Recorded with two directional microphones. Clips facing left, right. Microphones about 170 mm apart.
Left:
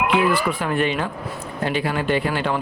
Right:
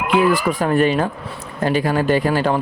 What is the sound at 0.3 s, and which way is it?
Speech, 40° right (ahead or behind).